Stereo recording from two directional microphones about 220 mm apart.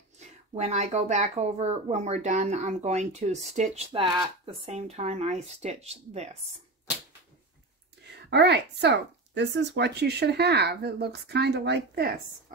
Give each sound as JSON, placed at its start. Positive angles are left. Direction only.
{"t": 0.2, "sound": "speech", "side_deg": -30}
{"t": 8.2, "sound": "speech", "side_deg": -50}